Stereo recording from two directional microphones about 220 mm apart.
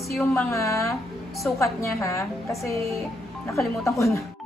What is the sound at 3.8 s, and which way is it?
Speech, 15° left (ahead or behind).